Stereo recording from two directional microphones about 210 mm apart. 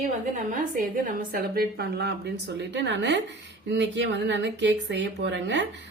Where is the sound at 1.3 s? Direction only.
50° right (ahead or behind).